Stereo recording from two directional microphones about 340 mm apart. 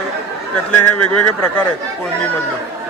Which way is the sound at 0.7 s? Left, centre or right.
Left.